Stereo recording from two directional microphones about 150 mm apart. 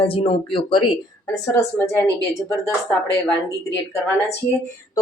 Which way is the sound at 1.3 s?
20° left (ahead or behind).